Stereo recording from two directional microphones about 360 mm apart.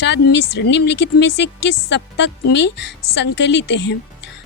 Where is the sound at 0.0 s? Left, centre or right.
Left.